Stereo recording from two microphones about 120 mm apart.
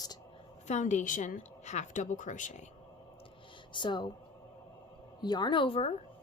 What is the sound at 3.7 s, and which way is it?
Speech, 40° left (ahead or behind).